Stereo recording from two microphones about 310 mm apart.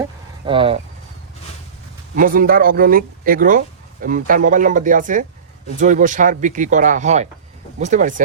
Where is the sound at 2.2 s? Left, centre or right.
Right.